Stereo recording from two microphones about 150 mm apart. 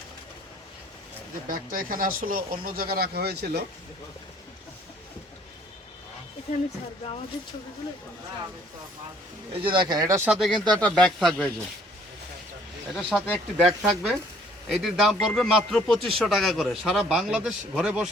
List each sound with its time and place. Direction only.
1.5 s speech: 70° right (ahead or behind); by 3.6 s 90° right
9.5 s speech: 35° right (ahead or behind)
10.2 s a man's voice: 5° right (ahead or behind)
12.9 s a man's voice: centre (ahead or behind)